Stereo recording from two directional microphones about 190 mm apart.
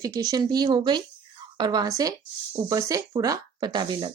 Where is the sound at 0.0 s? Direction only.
20° right (ahead or behind).